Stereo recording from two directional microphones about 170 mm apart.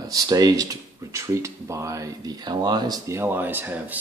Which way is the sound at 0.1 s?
20° right (ahead or behind).